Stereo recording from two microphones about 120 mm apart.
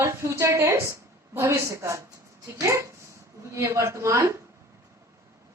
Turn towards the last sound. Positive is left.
turn(degrees=-25)  # may be behind; listen again after turning